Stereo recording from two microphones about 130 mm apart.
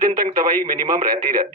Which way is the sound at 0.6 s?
90° right.